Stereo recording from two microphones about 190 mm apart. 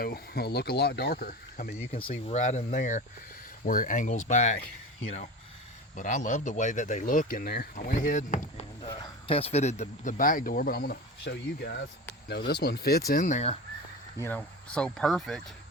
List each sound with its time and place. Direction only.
0.0 s speech: 55° left (ahead or behind)
2.0 s speech: 30° left (ahead or behind)
6.0 s speech: 40° left (ahead or behind)
8.8 s speech: 20° left (ahead or behind); by 13.0 s 55° left (ahead or behind)
13.1 s speech: 45° left (ahead or behind)
14.2 s speech: 10° left (ahead or behind)